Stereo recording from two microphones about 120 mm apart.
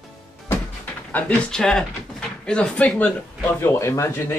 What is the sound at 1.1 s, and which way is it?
Speech, 10° left (ahead or behind).